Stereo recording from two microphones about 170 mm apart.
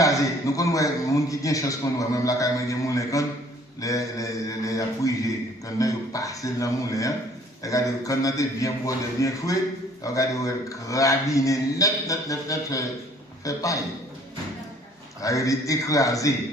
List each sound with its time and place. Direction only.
0.0 s a man's voice: 20° left (ahead or behind)
15.2 s a man's voice: 20° left (ahead or behind)